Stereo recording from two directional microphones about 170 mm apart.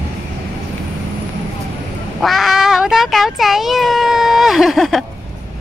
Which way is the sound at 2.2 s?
Centre (ahead or behind).